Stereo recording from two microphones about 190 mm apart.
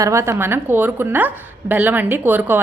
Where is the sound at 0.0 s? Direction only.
15° right (ahead or behind).